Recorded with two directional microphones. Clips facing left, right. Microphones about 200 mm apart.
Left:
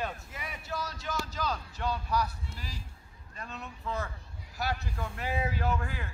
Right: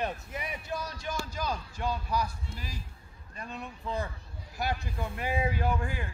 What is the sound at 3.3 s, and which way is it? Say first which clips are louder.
Speech: right 2 dB; 15° right (ahead or behind).